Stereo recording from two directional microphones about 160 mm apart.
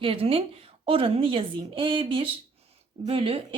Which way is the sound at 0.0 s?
35° right (ahead or behind).